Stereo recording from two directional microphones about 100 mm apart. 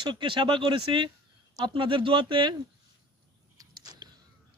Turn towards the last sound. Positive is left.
turn(degrees=-40)  # may be behind; listen again after turning